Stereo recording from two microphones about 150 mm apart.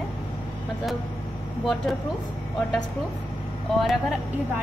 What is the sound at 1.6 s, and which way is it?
Speech, centre (ahead or behind).